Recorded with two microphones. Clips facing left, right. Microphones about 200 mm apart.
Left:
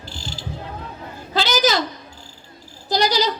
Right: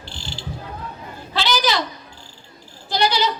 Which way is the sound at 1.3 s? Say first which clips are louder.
Left 2 dB; 45° left (ahead or behind).